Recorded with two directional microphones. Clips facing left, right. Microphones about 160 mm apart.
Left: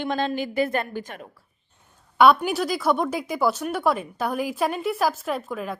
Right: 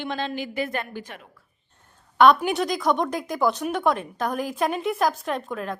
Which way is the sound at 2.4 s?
Centre (ahead or behind).